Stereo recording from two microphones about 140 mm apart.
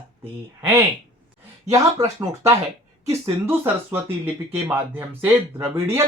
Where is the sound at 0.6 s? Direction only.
20° right (ahead or behind).